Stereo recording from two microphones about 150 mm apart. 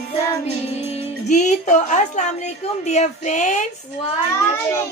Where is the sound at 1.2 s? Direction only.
50° left (ahead or behind).